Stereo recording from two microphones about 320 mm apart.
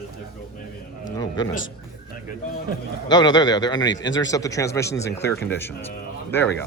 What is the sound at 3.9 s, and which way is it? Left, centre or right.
Speech, left.